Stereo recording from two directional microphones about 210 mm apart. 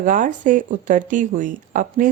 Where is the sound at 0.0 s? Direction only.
40° right (ahead or behind).